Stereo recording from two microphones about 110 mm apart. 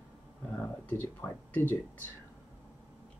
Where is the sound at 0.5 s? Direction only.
15° left (ahead or behind).